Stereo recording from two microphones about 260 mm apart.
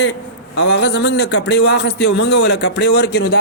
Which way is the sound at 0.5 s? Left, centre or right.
Left.